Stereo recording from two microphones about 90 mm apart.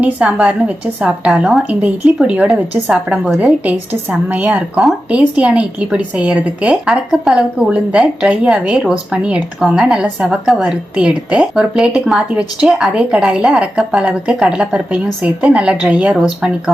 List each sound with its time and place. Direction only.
0.0 s a woman's voice: 15° right (ahead or behind)